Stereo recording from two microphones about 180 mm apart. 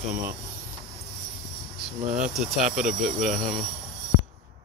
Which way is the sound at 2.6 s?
5° right (ahead or behind).